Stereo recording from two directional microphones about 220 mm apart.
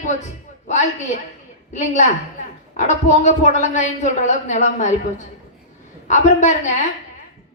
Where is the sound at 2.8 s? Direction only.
35° left (ahead or behind).